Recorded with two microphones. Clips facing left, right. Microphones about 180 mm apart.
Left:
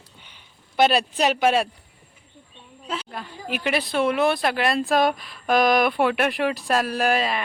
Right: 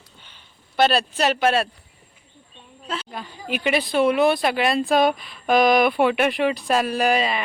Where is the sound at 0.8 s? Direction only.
15° left (ahead or behind).